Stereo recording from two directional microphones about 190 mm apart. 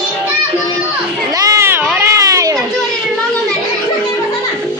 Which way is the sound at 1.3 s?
20° right (ahead or behind).